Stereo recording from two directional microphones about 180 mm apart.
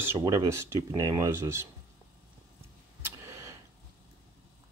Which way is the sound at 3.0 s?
15° right (ahead or behind).